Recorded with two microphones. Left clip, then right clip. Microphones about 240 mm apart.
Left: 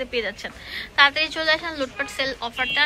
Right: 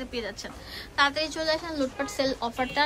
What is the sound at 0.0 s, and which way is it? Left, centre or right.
A woman's voice, centre.